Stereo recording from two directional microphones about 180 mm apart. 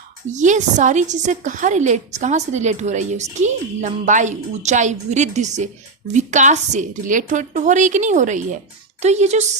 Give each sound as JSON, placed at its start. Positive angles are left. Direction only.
{"t": 0.3, "sound": "a woman's voice", "side_deg": -40}